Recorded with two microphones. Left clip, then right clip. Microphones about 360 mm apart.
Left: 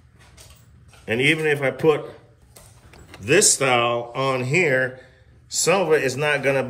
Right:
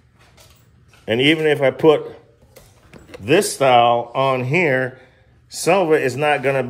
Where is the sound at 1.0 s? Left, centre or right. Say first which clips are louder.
Right 4 dB; centre.